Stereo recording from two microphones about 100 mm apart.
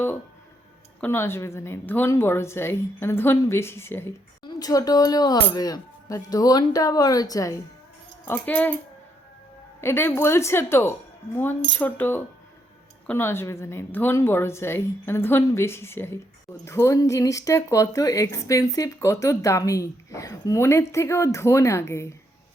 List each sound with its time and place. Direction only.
1.0 s a woman's voice: 25° left (ahead or behind)
4.4 s speech: 35° left (ahead or behind)
8.2 s speech: 20° left (ahead or behind)
9.8 s a woman's voice: 25° left (ahead or behind)